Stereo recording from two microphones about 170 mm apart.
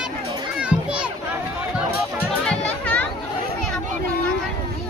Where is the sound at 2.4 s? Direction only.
5° left (ahead or behind).